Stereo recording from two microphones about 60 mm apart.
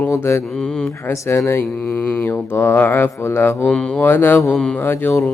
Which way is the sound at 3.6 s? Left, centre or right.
Centre.